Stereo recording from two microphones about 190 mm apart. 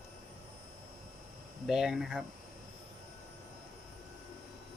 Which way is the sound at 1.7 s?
Centre (ahead or behind).